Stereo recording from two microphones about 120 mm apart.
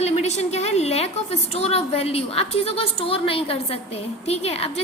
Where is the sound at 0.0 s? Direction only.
70° left (ahead or behind).